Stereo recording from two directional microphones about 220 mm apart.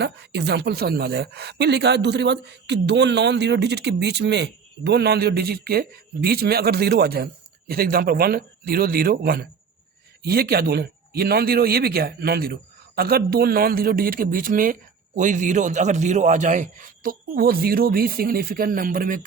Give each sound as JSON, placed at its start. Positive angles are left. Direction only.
{"t": 0.0, "sound": "a woman's voice", "side_deg": -50}